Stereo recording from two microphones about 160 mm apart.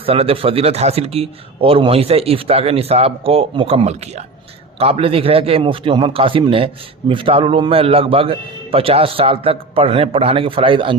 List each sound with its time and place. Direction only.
0.0 s speech: 35° right (ahead or behind)